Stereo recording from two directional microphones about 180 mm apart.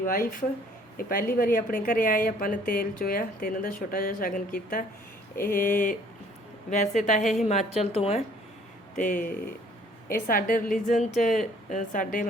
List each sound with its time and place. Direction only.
0.0 s a woman's voice: 50° left (ahead or behind); by 8.2 s 35° left (ahead or behind)
9.0 s speech: 45° left (ahead or behind)